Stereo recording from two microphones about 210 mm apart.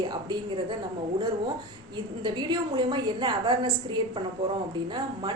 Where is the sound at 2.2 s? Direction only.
20° right (ahead or behind).